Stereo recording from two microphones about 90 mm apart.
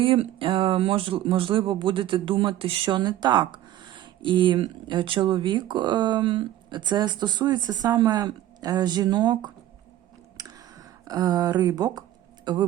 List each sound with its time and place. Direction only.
0.0 s speech: 75° right (ahead or behind); by 9.5 s 50° right (ahead or behind)
10.3 s a sound: 45° right (ahead or behind)
11.7 s speech: 45° right (ahead or behind)
12.5 s speech: 55° right (ahead or behind)